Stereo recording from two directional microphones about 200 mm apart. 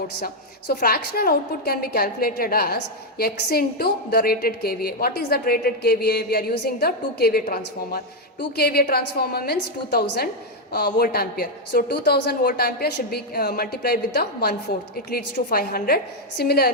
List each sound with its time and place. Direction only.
0.7 s a woman's voice: 50° left (ahead or behind)